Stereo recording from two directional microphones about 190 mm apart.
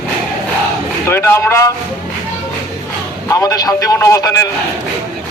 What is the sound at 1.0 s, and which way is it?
Speech, 10° left (ahead or behind).